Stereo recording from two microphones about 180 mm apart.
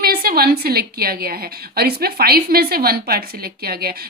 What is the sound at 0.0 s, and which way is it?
A woman's voice, 55° right (ahead or behind).